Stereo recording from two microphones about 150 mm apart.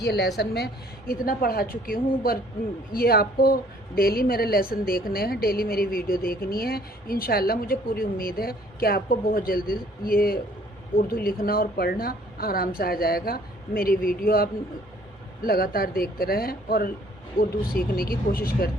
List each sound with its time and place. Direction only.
0.0 s a woman's voice: 90° left
2.9 s speech: 90° left
4.7 s a woman's voice: 75° left (ahead or behind)